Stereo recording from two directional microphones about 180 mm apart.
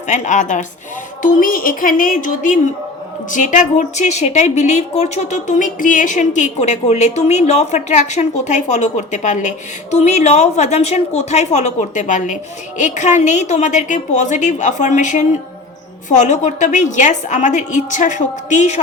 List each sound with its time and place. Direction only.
0.1 s a woman's voice: 45° left (ahead or behind)